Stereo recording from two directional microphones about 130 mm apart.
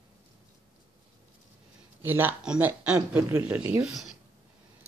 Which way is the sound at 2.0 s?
15° right (ahead or behind).